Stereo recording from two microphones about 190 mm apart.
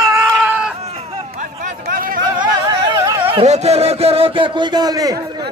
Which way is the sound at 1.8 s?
45° right (ahead or behind).